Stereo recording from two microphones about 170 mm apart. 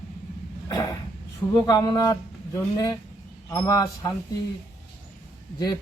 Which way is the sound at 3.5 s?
20° left (ahead or behind).